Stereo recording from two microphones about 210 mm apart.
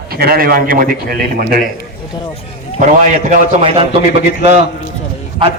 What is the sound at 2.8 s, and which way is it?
A man's voice, 35° right (ahead or behind).